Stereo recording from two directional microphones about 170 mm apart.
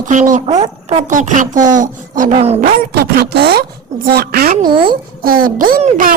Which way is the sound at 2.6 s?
65° right (ahead or behind).